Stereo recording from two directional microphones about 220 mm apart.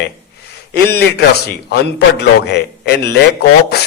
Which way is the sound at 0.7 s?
45° left (ahead or behind).